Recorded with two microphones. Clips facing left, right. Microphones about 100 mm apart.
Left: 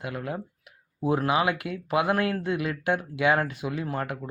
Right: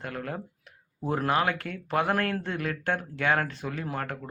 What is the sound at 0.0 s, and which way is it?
Speech, 5° left (ahead or behind).